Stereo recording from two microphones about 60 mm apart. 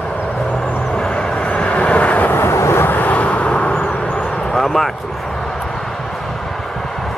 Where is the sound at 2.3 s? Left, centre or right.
Left; by 3.7 s centre.